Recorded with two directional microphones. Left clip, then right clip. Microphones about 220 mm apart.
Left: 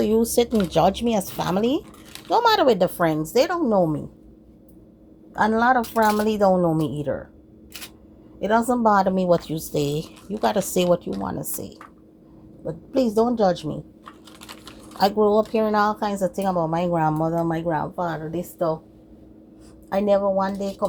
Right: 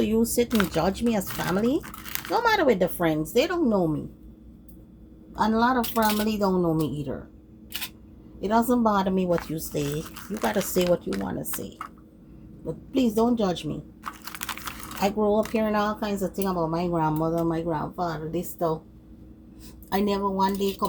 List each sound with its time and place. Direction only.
0.0 s speech: 35° left (ahead or behind)
5.3 s speech: 35° left (ahead or behind)
8.4 s speech: 35° left (ahead or behind)
14.9 s speech: 40° left (ahead or behind)
19.9 s speech: 15° left (ahead or behind)